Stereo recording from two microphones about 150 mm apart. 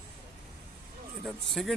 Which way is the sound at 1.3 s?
Centre (ahead or behind).